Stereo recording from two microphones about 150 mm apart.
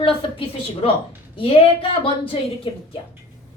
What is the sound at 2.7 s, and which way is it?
Speech, 35° left (ahead or behind).